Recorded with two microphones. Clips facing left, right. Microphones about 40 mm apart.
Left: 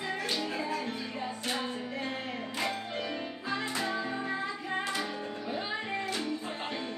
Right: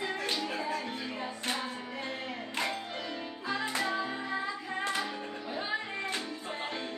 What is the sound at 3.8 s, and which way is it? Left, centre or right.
Music, centre.